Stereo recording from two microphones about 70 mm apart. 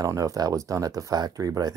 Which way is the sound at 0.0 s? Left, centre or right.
Right.